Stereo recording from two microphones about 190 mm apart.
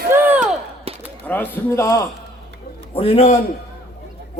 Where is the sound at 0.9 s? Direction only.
30° right (ahead or behind).